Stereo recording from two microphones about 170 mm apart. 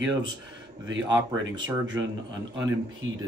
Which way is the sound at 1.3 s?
90° right.